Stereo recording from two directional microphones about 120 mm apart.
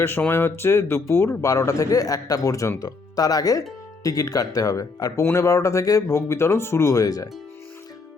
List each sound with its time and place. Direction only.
0.0 s speech: 20° left (ahead or behind)